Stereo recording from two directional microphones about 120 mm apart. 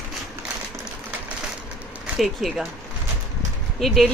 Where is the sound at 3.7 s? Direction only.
Centre (ahead or behind).